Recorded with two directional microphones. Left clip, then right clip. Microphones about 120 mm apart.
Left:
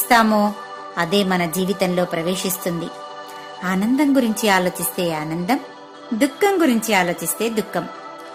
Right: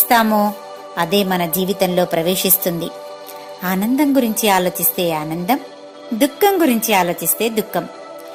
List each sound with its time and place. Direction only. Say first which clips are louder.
0.1 s a woman's voice: right 1 dB; 15° right (ahead or behind)
2.0 s a woman's voice: right 5 dB; 30° right (ahead or behind)